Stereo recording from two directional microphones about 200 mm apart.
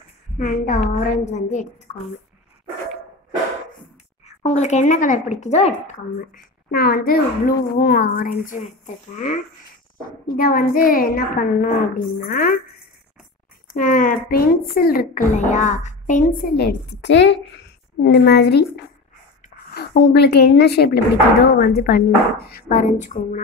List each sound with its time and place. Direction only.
0.4 s a woman's voice: 40° left (ahead or behind)
4.4 s a woman's voice: 35° left (ahead or behind)
6.7 s speech: 50° left (ahead or behind)
10.2 s speech: 45° left (ahead or behind)
13.7 s a woman's voice: 45° left (ahead or behind)
19.7 s a woman's voice: 55° left (ahead or behind); by 23.4 s 40° left (ahead or behind)